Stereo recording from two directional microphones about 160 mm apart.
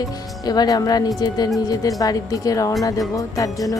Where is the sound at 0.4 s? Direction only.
25° left (ahead or behind).